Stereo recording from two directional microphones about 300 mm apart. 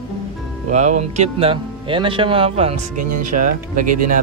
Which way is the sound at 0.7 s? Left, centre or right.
Right.